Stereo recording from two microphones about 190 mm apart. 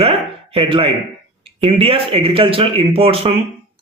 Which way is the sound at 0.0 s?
30° right (ahead or behind).